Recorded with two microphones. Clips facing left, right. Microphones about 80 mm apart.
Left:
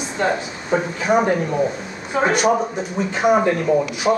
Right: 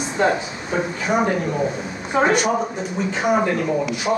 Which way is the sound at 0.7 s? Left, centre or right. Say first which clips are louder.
Left 3 dB; centre.